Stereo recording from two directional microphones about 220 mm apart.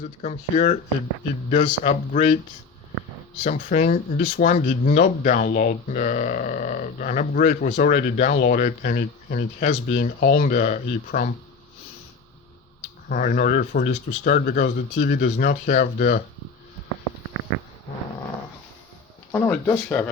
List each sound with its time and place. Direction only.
0.0 s speech: 30° left (ahead or behind)
3.4 s speech: 35° left (ahead or behind)
13.1 s speech: 40° left (ahead or behind)
19.3 s speech: 5° left (ahead or behind)